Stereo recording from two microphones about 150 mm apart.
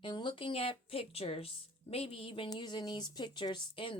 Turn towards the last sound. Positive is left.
turn(degrees=35)  # may be behind; listen again after turning